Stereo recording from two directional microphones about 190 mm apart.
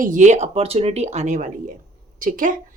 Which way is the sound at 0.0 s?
40° right (ahead or behind).